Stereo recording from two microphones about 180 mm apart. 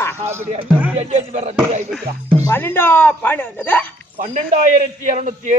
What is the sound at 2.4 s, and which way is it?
A man's voice, 10° left (ahead or behind).